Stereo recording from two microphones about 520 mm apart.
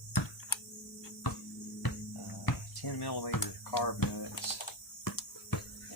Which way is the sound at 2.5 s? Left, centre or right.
Left.